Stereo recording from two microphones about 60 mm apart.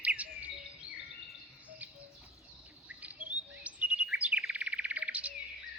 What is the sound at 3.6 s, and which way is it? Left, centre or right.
Chirp, right.